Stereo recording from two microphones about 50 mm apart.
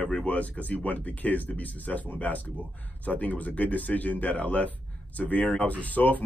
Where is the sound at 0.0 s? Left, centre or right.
Left.